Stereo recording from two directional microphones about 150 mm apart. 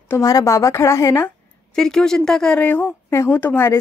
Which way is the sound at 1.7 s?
5° left (ahead or behind).